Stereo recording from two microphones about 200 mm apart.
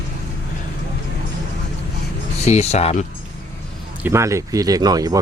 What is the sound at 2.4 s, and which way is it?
Speech, 35° left (ahead or behind).